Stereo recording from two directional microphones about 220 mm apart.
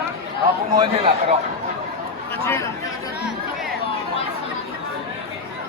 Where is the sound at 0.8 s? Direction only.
25° right (ahead or behind).